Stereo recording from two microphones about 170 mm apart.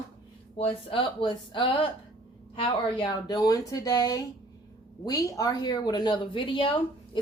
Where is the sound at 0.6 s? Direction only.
30° left (ahead or behind).